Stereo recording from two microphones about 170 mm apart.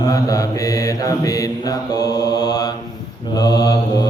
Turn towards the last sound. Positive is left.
turn(degrees=20)  # may be behind; listen again after turning